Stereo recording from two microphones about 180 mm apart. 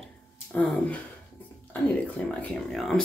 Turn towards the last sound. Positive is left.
turn(degrees=0)  # may be behind; listen again after turning